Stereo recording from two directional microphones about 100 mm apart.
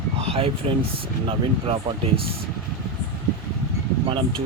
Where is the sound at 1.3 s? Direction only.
70° right (ahead or behind).